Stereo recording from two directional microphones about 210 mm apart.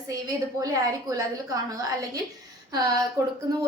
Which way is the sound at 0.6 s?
15° right (ahead or behind).